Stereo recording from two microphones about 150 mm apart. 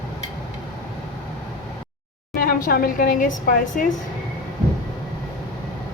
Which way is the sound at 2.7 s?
70° left (ahead or behind).